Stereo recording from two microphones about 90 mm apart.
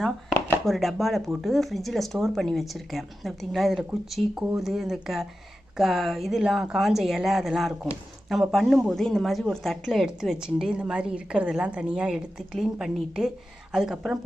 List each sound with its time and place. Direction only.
0.6 s a woman's voice: centre (ahead or behind)